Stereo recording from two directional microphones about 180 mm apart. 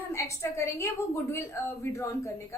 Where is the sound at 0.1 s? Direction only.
15° left (ahead or behind).